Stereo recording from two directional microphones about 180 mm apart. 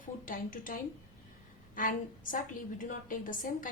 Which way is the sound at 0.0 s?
50° left (ahead or behind).